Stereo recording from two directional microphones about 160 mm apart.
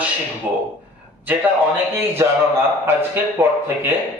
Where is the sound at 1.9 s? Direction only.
15° right (ahead or behind).